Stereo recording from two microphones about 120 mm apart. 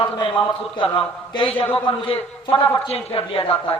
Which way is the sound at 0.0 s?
45° left (ahead or behind).